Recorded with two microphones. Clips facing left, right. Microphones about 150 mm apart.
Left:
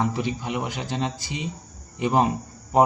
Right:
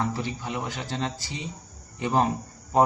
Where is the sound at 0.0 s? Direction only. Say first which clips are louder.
Left 4 dB; 20° left (ahead or behind).